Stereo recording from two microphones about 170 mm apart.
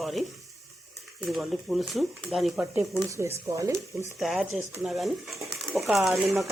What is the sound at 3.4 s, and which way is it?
Speech, 20° right (ahead or behind).